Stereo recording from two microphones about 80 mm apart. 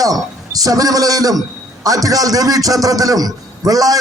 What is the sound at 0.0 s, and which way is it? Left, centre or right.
A man's voice, right.